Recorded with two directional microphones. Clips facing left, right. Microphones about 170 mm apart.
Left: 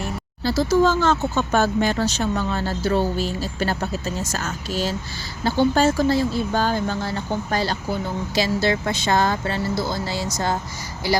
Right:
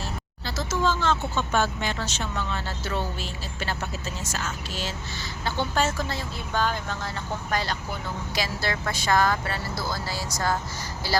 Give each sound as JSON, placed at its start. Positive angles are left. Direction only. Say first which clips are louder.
{"t": 0.4, "sound": "speech", "louder": "left 9 dB", "side_deg": 35}